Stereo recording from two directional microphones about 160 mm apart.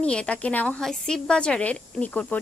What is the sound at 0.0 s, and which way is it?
A woman's voice, 5° left (ahead or behind).